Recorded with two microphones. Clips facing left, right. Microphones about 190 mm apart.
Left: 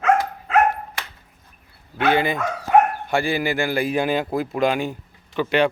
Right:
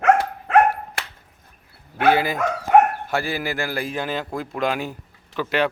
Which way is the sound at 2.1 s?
5° right (ahead or behind).